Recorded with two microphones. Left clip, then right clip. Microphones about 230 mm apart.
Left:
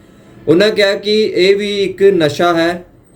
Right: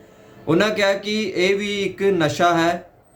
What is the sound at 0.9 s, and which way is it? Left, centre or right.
Speech, right.